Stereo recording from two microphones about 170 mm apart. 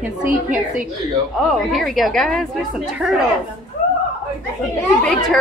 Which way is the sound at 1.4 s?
Centre (ahead or behind).